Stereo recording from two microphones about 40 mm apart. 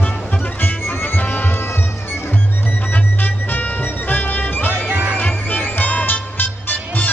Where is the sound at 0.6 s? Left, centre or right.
Left.